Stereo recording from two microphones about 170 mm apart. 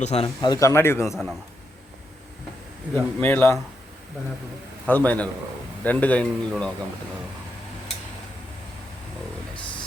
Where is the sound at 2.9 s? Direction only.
10° left (ahead or behind).